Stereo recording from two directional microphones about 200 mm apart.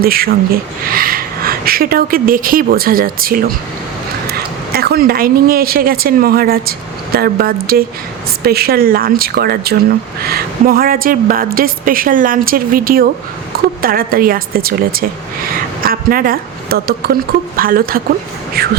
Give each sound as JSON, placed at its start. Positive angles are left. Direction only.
{"t": 0.0, "sound": "speech", "side_deg": -50}
{"t": 4.7, "sound": "a woman's voice", "side_deg": -50}